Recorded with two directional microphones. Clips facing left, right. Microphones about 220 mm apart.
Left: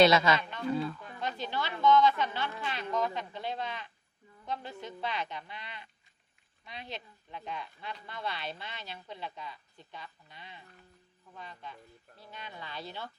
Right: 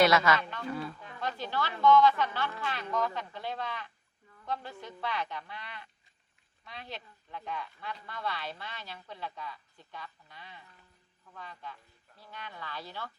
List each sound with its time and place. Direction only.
0.3 s speech: 20° left (ahead or behind)